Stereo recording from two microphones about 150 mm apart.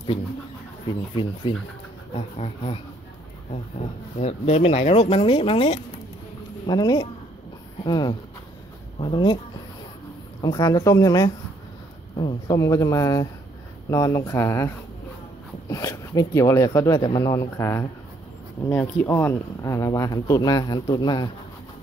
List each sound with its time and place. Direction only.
0.8 s speech: 35° left (ahead or behind)
4.2 s speech: 45° left (ahead or behind)
6.6 s speech: 30° left (ahead or behind)
10.4 s speech: 25° left (ahead or behind)
12.4 s speech: 20° left (ahead or behind)